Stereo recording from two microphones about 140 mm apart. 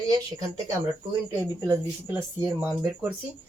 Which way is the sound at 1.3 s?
20° right (ahead or behind).